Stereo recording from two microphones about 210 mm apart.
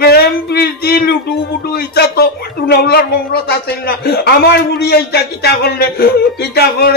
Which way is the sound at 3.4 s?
50° left (ahead or behind).